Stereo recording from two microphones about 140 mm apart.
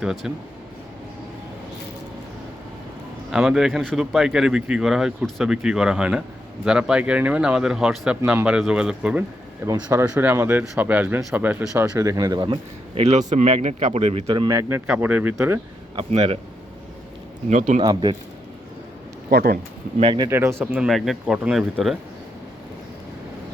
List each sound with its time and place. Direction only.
0.0 s speech: 5° right (ahead or behind)
3.2 s speech: 5° right (ahead or behind)
9.6 s speech: 20° right (ahead or behind); by 11.4 s centre (ahead or behind)
11.7 s speech: 25° right (ahead or behind)
12.9 s speech: 50° right (ahead or behind)
14.4 s speech: 20° right (ahead or behind)
14.8 s speech: 10° right (ahead or behind)
16.0 s speech: 45° right (ahead or behind)
17.5 s speech: 60° right (ahead or behind)
17.8 s speech: 30° right (ahead or behind)
19.3 s speech: 90° right
20.1 s speech: 25° right (ahead or behind)
20.8 s speech: centre (ahead or behind)